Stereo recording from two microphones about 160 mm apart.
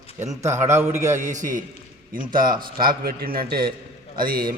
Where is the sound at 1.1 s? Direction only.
50° right (ahead or behind); by 3.7 s 70° right (ahead or behind).